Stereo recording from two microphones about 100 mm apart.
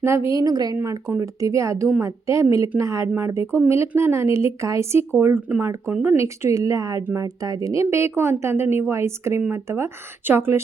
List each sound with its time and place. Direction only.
0.0 s a woman's voice: 25° right (ahead or behind)
0.3 s speech: 40° right (ahead or behind)
0.8 s a woman's voice: 25° right (ahead or behind)
6.1 s a woman's voice: 30° right (ahead or behind)